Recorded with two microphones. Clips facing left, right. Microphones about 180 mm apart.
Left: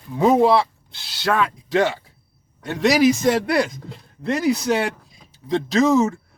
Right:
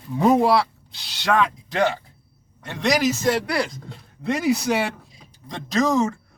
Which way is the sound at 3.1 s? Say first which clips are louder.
Left 4 dB; 20° left (ahead or behind).